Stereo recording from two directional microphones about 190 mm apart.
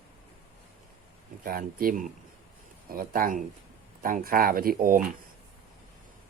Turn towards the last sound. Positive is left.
turn(degrees=-50)  # may be behind; listen again after turning